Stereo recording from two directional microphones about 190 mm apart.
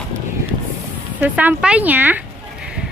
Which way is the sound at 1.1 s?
10° right (ahead or behind).